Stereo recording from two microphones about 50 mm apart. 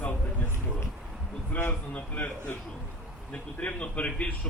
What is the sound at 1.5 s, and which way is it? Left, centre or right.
Speech, left.